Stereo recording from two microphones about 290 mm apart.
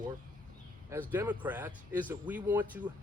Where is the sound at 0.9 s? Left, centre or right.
Centre.